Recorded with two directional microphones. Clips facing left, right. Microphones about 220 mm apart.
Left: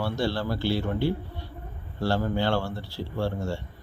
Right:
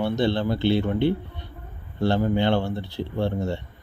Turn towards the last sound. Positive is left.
turn(degrees=-20)  # may be behind; listen again after turning